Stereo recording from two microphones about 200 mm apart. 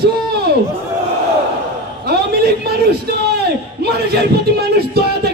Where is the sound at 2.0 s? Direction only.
50° right (ahead or behind).